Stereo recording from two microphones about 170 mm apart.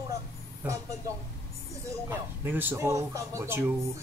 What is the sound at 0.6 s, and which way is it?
Speech, 10° right (ahead or behind).